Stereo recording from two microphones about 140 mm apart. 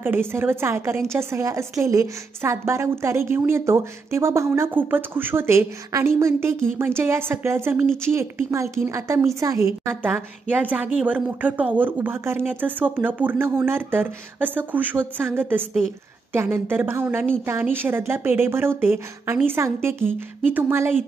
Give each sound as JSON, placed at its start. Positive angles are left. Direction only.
{"t": 0.0, "sound": "a woman's voice", "side_deg": -15}